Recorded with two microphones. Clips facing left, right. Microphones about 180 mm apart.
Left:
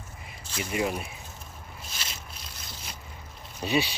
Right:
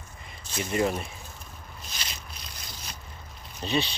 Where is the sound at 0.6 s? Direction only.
10° left (ahead or behind).